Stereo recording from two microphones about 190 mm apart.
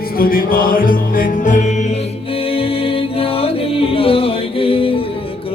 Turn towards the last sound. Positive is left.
turn(degrees=30)  # may be behind; listen again after turning